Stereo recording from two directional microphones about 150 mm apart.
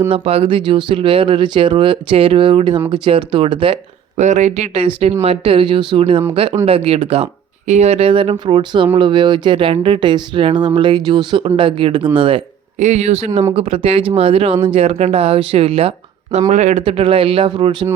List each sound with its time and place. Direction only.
0.1 s speech: 40° right (ahead or behind)
4.2 s speech: 50° right (ahead or behind); by 12.4 s 35° right (ahead or behind)
12.8 s speech: 45° right (ahead or behind); by 17.8 s 30° right (ahead or behind)